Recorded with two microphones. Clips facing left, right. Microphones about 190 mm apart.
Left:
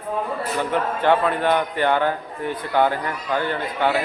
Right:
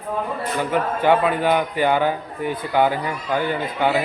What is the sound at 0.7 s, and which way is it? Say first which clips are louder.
A man's voice: right 2 dB; 10° right (ahead or behind).